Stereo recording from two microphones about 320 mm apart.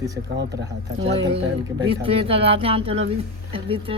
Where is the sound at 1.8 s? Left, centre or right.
Centre.